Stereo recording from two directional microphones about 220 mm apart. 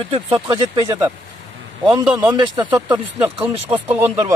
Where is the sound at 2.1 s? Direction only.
20° right (ahead or behind).